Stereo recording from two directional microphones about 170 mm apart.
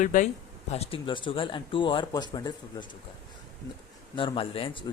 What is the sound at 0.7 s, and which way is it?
Speech, 35° left (ahead or behind).